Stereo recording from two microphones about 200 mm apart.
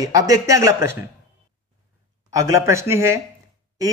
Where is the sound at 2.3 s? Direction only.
15° right (ahead or behind).